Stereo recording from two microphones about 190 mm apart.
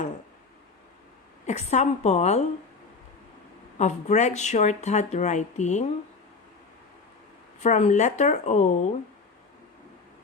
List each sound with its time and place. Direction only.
1.5 s speech: 35° left (ahead or behind)
3.8 s speech: 40° left (ahead or behind)
7.6 s speech: 40° left (ahead or behind)